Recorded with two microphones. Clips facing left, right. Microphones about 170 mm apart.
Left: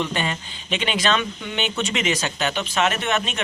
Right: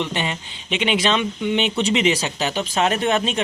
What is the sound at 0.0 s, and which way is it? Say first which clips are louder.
Speech: even; 25° right (ahead or behind).